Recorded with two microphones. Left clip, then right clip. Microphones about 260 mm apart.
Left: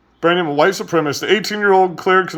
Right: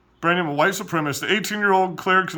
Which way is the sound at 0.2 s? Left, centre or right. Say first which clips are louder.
Left 5 dB; right.